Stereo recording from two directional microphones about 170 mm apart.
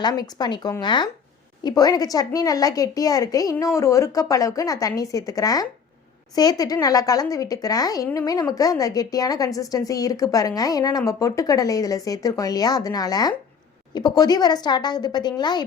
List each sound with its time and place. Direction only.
0.0 s a woman's voice: 25° left (ahead or behind)